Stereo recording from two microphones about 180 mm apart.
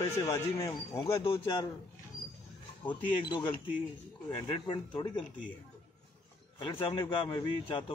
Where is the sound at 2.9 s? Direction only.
25° left (ahead or behind).